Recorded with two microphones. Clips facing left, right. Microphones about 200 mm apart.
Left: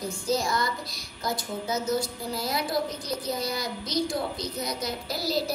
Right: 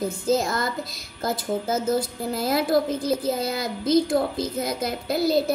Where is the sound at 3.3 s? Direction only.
55° right (ahead or behind).